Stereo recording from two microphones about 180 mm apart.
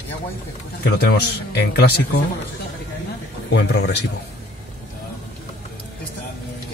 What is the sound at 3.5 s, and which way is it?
Speech, 70° left (ahead or behind).